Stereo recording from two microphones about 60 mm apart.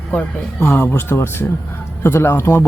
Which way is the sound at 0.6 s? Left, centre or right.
Left.